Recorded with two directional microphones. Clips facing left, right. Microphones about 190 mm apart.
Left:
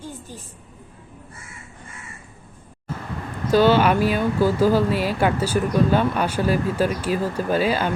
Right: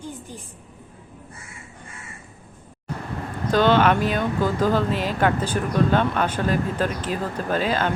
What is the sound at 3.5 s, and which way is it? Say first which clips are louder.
Speech: left 2 dB; 10° left (ahead or behind).